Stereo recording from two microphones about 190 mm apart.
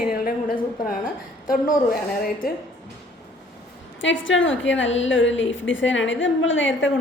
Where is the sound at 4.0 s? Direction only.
80° left.